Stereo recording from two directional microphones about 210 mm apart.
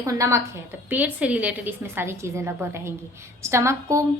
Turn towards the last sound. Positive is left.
turn(degrees=-15)  # may be behind; listen again after turning